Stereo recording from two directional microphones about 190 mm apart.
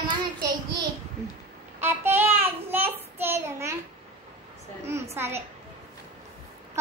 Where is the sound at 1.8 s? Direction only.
10° right (ahead or behind).